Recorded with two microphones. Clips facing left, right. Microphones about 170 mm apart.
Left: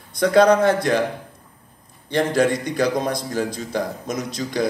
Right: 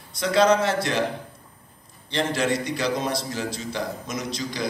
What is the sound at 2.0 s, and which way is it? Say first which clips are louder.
A man's voice: left 5 dB; 50° left (ahead or behind).